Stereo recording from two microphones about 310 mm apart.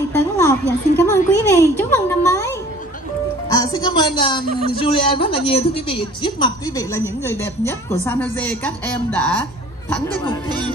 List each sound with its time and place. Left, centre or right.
0.1 s a sound: centre
1.3 s music: centre
3.5 s a man's voice: centre